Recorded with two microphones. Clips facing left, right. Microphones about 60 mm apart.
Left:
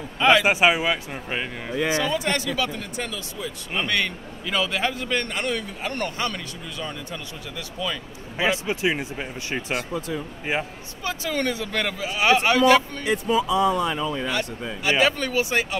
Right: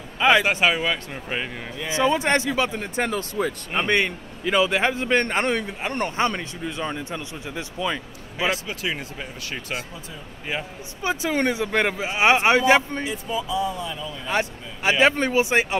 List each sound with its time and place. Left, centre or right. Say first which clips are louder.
0.2 s speech: even; centre
0.5 s speech: left 2 dB; centre
2.0 s speech: right 4 dB; right
3.7 s a man's voice: right 2 dB; right
8.4 s speech: left 2 dB; left
9.8 s speech: left 7 dB; left
10.5 s speech: left 3 dB; centre
11.1 s a man's voice: right 3 dB; right
13.0 s speech: left 5 dB; left
14.8 s a man's voice: right 3 dB; right